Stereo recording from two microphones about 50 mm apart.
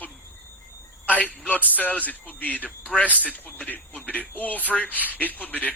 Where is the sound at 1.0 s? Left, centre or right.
Left.